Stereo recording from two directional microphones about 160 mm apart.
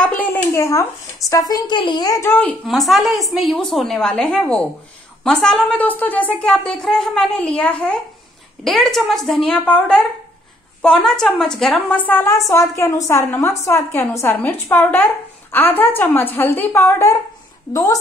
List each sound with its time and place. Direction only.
0.0 s a sound: 10° left (ahead or behind)
1.5 s speech: 30° left (ahead or behind); by 2.5 s 15° left (ahead or behind)
2.6 s a woman's voice: centre (ahead or behind); by 17.2 s 15° left (ahead or behind)